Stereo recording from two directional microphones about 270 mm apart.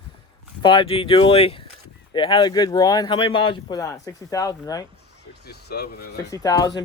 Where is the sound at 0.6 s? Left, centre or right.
Centre.